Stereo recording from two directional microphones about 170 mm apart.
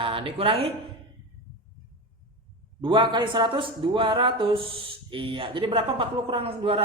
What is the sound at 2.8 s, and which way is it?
A man's voice, 30° right (ahead or behind).